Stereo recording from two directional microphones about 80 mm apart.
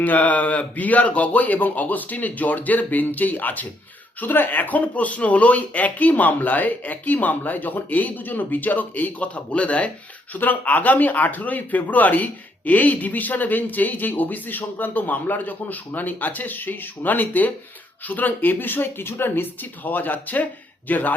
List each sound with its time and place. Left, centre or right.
0.0 s speech: left